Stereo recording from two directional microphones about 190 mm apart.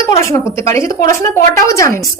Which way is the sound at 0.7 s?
15° left (ahead or behind).